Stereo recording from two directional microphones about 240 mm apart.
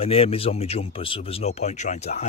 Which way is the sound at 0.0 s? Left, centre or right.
Left.